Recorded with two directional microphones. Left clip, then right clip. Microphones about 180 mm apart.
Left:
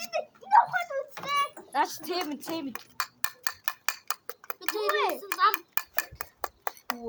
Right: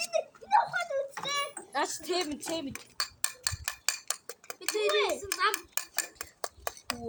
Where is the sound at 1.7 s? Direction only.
25° left (ahead or behind).